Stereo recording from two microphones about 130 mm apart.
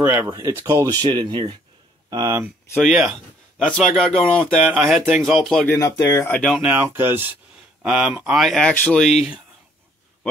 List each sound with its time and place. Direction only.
0.0 s speech: 15° right (ahead or behind)
2.7 s speech: centre (ahead or behind)
5.7 s speech: 25° left (ahead or behind)
6.6 s speech: 10° right (ahead or behind)